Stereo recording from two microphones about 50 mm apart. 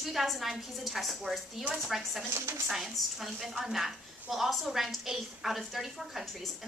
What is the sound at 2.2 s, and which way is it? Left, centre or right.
Speech, right.